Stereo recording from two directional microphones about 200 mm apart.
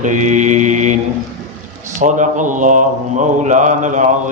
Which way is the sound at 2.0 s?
40° right (ahead or behind).